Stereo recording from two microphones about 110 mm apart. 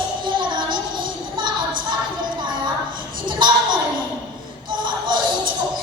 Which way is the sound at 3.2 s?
45° right (ahead or behind).